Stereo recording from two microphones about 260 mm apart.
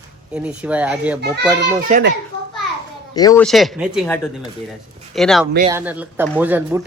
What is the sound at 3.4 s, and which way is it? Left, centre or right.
Speech, centre.